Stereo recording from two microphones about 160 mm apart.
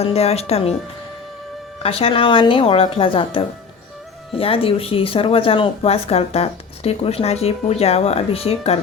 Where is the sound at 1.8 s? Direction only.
35° left (ahead or behind).